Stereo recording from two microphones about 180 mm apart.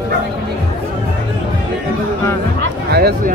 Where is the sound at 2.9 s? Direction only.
60° right (ahead or behind).